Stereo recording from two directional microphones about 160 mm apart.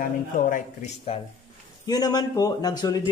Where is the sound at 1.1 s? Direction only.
40° left (ahead or behind).